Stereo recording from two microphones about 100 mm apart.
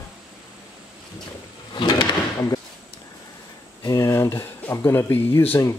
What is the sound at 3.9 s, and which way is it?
Speech, 30° left (ahead or behind).